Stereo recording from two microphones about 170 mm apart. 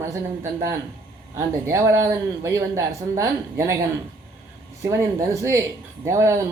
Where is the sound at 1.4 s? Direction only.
15° right (ahead or behind).